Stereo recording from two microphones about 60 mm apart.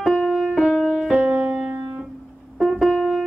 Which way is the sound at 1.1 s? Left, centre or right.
Centre.